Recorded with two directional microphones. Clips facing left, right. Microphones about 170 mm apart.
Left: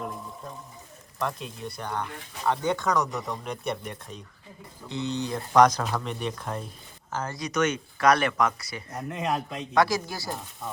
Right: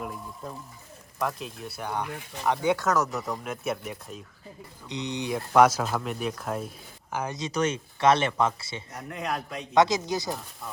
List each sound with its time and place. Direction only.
1.2 s speech: centre (ahead or behind)
4.9 s speech: 15° right (ahead or behind)
7.3 s speech: 30° right (ahead or behind)
9.0 s speech: centre (ahead or behind)
9.7 s speech: 20° right (ahead or behind)